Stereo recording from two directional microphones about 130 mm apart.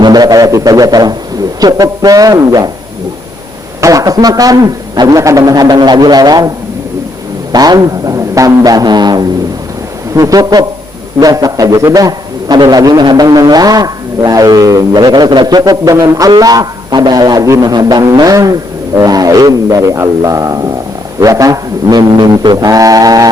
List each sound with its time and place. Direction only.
0.0 s a man's voice: 30° right (ahead or behind)
3.8 s a man's voice: 25° right (ahead or behind)
7.5 s a man's voice: 30° right (ahead or behind)